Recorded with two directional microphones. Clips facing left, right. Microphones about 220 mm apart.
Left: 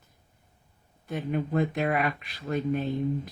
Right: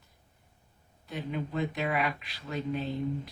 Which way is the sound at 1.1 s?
50° left (ahead or behind).